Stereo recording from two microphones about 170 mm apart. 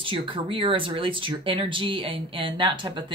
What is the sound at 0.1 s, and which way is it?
Speech, 30° right (ahead or behind).